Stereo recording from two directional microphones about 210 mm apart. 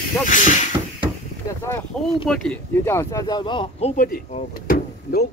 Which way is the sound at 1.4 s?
10° left (ahead or behind).